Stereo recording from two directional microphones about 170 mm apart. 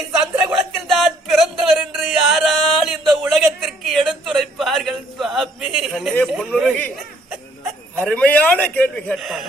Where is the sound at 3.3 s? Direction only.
Centre (ahead or behind).